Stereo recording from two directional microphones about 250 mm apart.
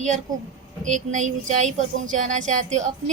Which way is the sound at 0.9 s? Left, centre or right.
Right.